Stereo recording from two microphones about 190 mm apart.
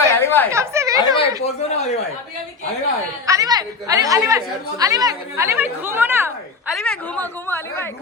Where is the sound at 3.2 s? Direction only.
20° right (ahead or behind).